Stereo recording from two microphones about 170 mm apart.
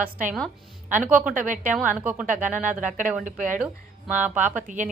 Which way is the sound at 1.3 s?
50° right (ahead or behind).